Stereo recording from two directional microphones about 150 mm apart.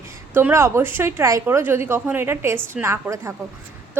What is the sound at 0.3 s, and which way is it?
A woman's voice, 15° right (ahead or behind).